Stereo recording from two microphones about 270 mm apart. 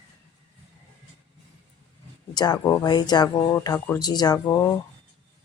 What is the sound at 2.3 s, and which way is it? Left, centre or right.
Speech, centre.